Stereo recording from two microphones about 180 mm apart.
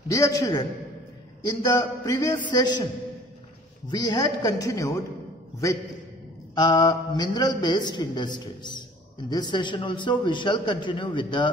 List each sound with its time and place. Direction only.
0.1 s speech: 20° left (ahead or behind)
3.9 s speech: 20° left (ahead or behind)
6.5 s speech: 25° left (ahead or behind)